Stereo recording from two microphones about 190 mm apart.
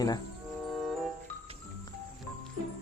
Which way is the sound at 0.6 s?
Centre (ahead or behind).